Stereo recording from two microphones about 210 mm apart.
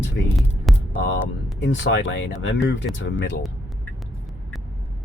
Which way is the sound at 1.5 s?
60° left (ahead or behind).